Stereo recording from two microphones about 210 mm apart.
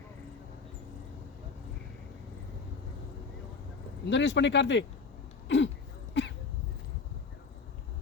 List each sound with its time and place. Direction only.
4.1 s speech: 60° left (ahead or behind)
5.5 s a sound: 60° left (ahead or behind)
6.2 s dog: 55° left (ahead or behind)